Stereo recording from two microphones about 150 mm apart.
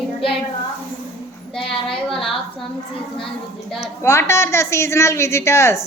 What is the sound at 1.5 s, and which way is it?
Speech, 5° left (ahead or behind).